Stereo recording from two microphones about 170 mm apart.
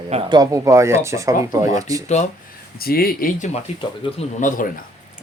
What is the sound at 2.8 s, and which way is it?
Speech, 60° left (ahead or behind).